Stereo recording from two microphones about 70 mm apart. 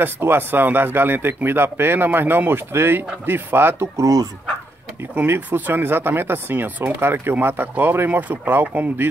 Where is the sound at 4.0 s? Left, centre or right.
Right.